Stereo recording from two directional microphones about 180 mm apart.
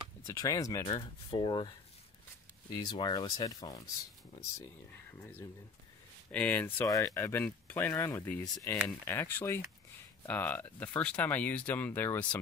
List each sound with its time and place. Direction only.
0.3 s speech: 20° left (ahead or behind)
2.7 s speech: 25° left (ahead or behind)
6.3 s speech: 10° left (ahead or behind)